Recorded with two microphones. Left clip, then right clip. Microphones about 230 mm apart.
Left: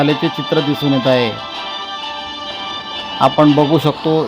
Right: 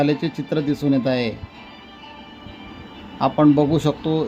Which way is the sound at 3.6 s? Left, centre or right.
Centre.